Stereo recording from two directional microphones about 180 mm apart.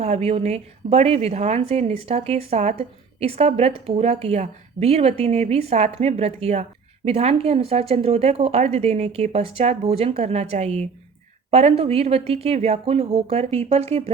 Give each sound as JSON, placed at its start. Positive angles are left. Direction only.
{"t": 0.0, "sound": "a woman's voice", "side_deg": -35}